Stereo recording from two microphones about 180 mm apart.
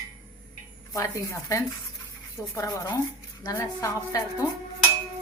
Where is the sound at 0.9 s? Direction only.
20° left (ahead or behind).